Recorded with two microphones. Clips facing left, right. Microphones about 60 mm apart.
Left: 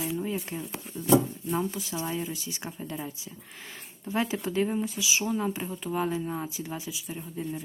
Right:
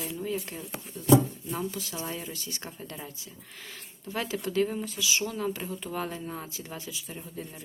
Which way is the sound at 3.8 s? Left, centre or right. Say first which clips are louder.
Left 5 dB; centre.